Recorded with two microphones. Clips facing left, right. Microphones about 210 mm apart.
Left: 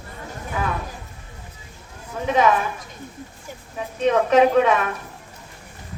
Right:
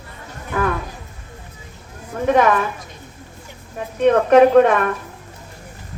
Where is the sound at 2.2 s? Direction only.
50° right (ahead or behind).